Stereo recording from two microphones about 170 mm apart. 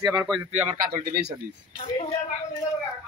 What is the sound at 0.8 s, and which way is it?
Speech, 60° right (ahead or behind).